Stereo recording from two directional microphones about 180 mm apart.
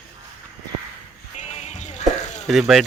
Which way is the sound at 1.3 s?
40° left (ahead or behind).